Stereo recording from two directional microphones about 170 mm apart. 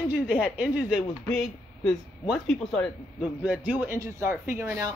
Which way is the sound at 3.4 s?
10° right (ahead or behind).